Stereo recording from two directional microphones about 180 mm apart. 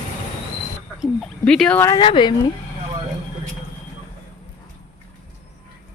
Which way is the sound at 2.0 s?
25° left (ahead or behind).